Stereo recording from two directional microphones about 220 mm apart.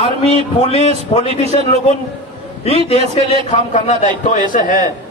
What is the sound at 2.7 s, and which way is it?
A man's voice, 25° left (ahead or behind).